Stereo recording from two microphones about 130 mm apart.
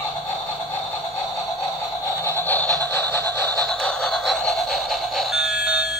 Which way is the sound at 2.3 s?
15° left (ahead or behind).